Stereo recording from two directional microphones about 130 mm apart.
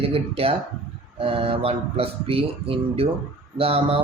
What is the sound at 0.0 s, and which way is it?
Speech, 45° right (ahead or behind).